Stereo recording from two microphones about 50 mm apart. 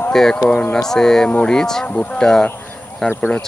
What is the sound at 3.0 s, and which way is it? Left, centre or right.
Speech, left.